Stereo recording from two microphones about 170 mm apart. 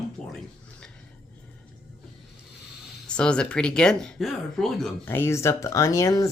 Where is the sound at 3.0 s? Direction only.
5° left (ahead or behind).